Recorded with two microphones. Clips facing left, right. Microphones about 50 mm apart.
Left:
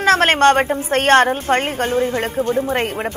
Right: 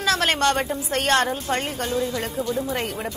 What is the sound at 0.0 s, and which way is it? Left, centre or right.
A woman's voice, left.